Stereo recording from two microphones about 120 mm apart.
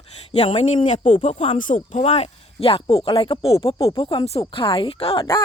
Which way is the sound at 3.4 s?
55° left (ahead or behind).